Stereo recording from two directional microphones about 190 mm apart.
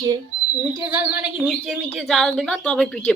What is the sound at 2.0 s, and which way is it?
Speech, centre (ahead or behind).